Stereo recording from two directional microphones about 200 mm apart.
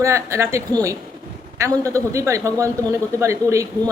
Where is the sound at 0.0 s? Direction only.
15° right (ahead or behind).